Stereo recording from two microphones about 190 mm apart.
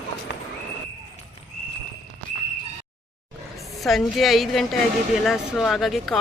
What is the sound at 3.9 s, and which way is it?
Speech, centre (ahead or behind).